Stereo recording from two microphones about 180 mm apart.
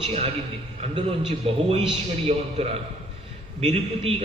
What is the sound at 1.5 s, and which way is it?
Speech, 35° right (ahead or behind).